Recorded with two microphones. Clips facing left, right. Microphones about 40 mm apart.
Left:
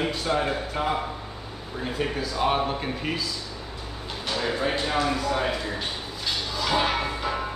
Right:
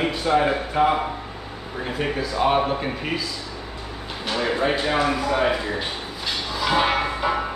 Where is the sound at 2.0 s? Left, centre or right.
Centre.